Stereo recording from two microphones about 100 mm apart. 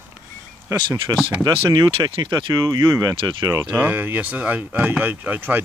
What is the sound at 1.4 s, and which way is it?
Speech, 45° right (ahead or behind).